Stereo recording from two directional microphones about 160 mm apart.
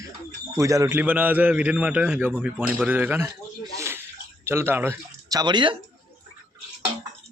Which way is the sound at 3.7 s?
15° right (ahead or behind).